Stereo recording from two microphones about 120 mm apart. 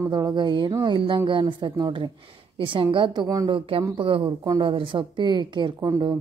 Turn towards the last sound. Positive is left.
turn(degrees=-35)  # may be behind; listen again after turning